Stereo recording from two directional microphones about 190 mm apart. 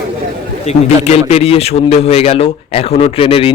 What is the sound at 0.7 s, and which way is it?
A man's voice, 35° left (ahead or behind).